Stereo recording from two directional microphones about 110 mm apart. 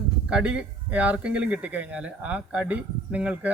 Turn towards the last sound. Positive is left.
turn(degrees=-15)  # may be behind; listen again after turning